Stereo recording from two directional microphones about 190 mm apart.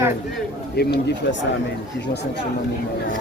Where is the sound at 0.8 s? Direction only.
60° left (ahead or behind).